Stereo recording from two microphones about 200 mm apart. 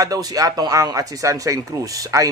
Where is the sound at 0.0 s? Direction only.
15° right (ahead or behind).